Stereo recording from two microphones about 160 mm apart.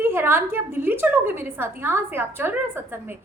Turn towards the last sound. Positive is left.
turn(degrees=-15)  # may be behind; listen again after turning